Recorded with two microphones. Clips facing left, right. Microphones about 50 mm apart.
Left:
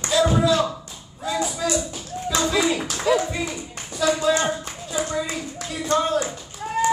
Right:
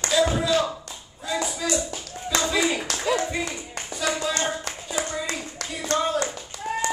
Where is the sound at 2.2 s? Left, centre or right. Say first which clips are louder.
Left 2 dB; centre.